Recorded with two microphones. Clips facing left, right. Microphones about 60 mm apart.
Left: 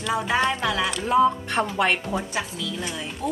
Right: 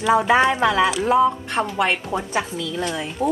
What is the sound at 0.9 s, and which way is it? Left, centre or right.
Speech, centre.